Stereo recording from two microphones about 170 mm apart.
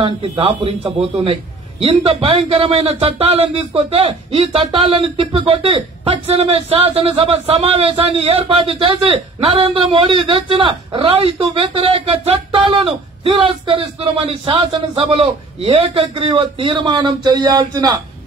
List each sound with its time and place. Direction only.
0.0 s a man's voice: 35° right (ahead or behind)